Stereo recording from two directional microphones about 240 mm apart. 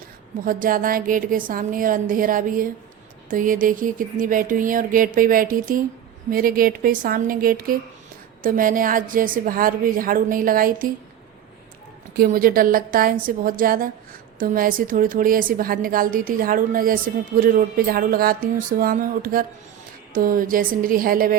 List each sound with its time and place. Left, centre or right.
0.4 s a woman's voice: right
12.1 s a woman's voice: right